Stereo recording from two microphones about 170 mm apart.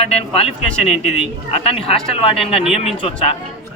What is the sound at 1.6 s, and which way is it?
A man's voice, 35° left (ahead or behind).